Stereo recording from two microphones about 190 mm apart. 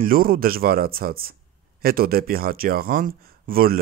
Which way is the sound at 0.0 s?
50° right (ahead or behind).